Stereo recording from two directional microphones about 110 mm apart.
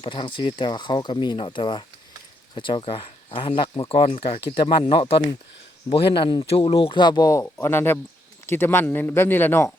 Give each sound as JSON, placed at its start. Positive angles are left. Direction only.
{"t": 0.0, "sound": "speech", "side_deg": 50}
{"t": 6.5, "sound": "speech", "side_deg": 60}
{"t": 7.0, "sound": "speech", "side_deg": 40}
{"t": 7.4, "sound": "a man's voice", "side_deg": 20}